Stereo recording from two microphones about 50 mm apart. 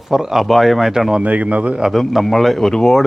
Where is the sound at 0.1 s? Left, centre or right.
Centre.